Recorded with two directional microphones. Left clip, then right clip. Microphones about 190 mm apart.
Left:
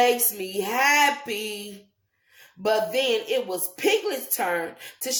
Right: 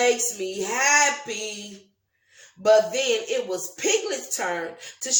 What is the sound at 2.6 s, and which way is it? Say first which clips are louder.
Speech: right 4 dB; 35° left (ahead or behind).